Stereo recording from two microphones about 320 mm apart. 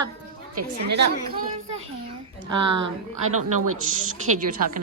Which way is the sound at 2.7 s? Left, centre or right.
Right.